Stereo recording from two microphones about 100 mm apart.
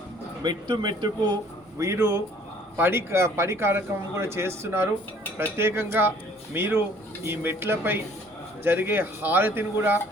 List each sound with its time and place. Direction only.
0.4 s speech: 45° right (ahead or behind)
1.8 s speech: 30° right (ahead or behind)